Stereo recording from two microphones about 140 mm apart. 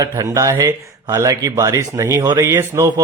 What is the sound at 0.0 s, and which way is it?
Speech, 25° right (ahead or behind).